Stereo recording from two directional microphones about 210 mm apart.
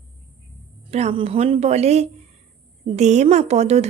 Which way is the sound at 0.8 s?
25° right (ahead or behind).